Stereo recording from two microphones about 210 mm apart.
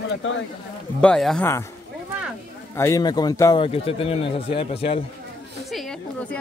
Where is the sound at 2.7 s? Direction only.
15° left (ahead or behind).